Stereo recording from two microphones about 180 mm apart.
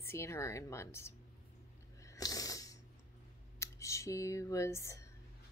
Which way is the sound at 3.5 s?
15° left (ahead or behind).